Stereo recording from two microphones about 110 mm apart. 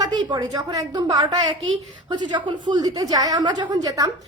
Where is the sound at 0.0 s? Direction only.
40° right (ahead or behind).